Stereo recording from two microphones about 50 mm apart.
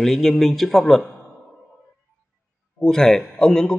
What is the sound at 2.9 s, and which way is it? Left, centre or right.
Speech, centre.